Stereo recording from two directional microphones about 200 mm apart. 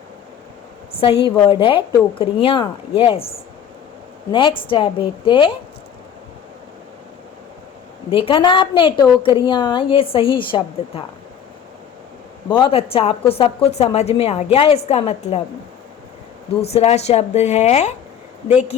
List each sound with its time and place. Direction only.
0.9 s a woman's voice: 25° left (ahead or behind)
8.1 s a woman's voice: 25° left (ahead or behind)
12.5 s a woman's voice: 25° left (ahead or behind)
16.6 s a woman's voice: 30° left (ahead or behind)